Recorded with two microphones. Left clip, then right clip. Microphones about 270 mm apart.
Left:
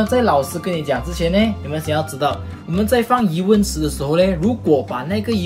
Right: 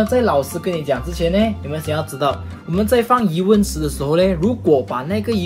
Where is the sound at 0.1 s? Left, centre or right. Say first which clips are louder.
Even; centre.